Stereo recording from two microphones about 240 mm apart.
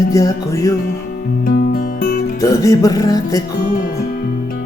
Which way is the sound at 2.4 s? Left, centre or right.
Centre.